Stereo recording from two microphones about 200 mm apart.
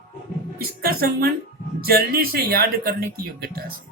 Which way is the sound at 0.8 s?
50° right (ahead or behind).